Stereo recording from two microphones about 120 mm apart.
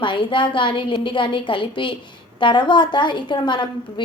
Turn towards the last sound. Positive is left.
turn(degrees=40)  # may be behind; listen again after turning